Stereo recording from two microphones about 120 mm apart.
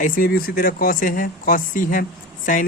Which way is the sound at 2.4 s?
90° left.